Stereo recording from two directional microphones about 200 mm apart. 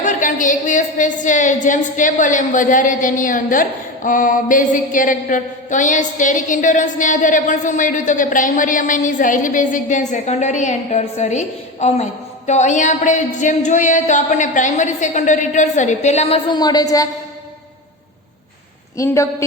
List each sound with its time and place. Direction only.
0.0 s a woman's voice: 40° left (ahead or behind); by 17.1 s 15° left (ahead or behind)
18.9 s a woman's voice: 15° left (ahead or behind)